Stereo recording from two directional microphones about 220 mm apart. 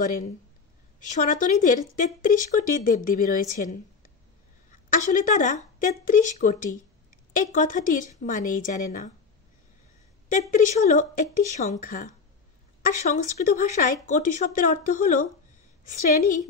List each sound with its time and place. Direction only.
0.9 s speech: 35° left (ahead or behind)
10.5 s speech: 35° left (ahead or behind)